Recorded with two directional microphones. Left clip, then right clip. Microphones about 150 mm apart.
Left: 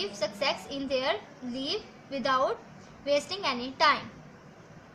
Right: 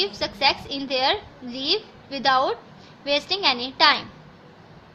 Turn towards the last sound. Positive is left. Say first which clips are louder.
# right 7 dB
turn(degrees=-40)  # may be behind; listen again after turning